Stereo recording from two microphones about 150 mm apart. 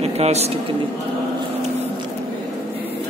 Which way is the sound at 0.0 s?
45° right (ahead or behind).